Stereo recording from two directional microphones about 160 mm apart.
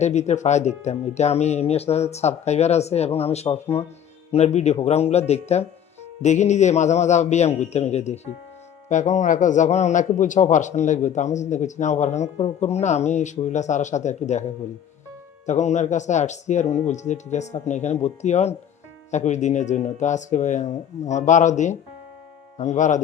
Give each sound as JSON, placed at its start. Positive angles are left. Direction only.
{"t": 0.0, "sound": "a man's voice", "side_deg": 45}